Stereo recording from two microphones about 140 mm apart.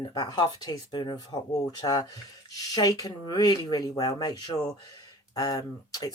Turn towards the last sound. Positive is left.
turn(degrees=25)  # may be behind; listen again after turning